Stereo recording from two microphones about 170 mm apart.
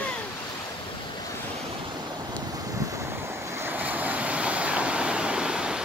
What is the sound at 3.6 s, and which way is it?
Waves, 10° right (ahead or behind).